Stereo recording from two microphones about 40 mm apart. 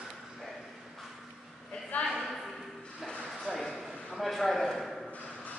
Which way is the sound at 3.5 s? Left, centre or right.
Centre.